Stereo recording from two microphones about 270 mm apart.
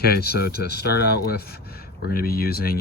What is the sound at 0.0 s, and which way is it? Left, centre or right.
Speech, left.